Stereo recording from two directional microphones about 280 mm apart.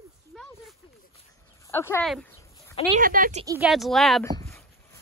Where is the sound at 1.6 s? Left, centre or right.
Centre.